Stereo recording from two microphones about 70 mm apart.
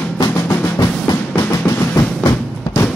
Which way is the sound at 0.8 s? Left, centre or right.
Left.